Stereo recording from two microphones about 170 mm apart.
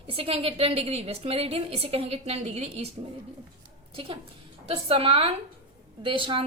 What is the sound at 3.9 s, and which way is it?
A woman's voice, 30° right (ahead or behind).